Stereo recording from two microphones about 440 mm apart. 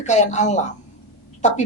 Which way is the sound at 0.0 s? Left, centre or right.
Centre.